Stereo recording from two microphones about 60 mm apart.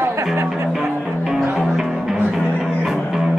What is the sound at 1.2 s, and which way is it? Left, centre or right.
Music, centre.